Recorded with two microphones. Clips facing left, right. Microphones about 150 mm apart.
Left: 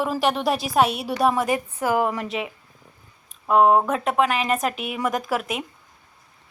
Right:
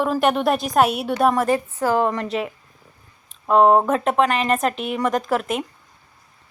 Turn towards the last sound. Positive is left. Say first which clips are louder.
# right 4 dB
turn(degrees=0)  # may be behind; listen again after turning